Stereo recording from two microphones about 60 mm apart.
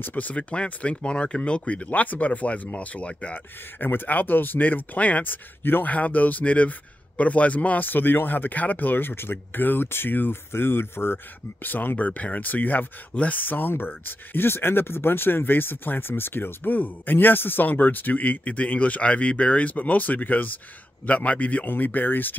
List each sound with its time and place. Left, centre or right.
0.0 s speech: left
3.8 s speech: left